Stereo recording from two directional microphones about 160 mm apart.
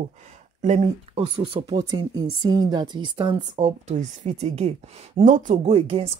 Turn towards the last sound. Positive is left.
turn(degrees=-35)  # may be behind; listen again after turning